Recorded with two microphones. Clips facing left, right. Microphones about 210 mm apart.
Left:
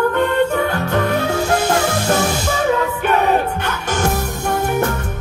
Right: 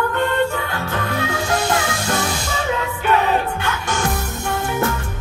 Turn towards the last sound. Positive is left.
turn(degrees=50)  # may be behind; listen again after turning